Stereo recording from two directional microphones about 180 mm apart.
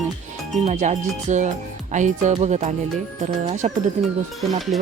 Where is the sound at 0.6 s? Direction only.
45° right (ahead or behind).